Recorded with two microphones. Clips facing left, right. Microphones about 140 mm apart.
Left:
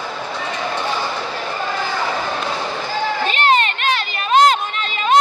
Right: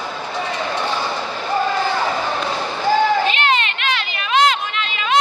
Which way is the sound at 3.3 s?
40° left (ahead or behind).